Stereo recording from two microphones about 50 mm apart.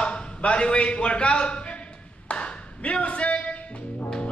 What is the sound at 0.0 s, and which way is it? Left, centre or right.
A man's voice, left.